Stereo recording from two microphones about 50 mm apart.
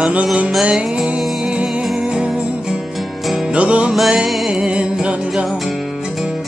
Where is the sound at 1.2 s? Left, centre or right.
Centre.